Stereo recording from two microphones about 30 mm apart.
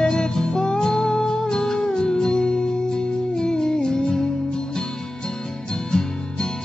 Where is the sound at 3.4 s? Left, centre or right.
Left.